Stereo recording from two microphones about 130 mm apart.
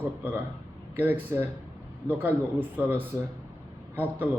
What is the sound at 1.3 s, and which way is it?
A man's voice, 20° right (ahead or behind).